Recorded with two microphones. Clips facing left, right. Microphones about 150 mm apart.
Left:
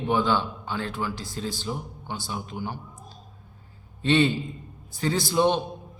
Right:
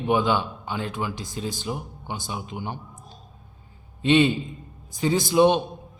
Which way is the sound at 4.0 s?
15° right (ahead or behind).